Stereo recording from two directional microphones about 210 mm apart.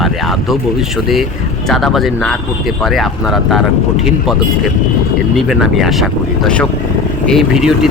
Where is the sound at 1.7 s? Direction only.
Centre (ahead or behind).